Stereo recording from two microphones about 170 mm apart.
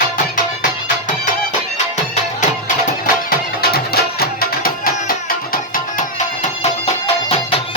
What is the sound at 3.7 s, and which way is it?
Music, 65° left (ahead or behind).